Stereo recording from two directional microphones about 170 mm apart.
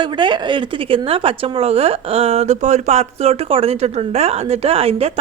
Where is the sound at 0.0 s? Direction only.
25° right (ahead or behind).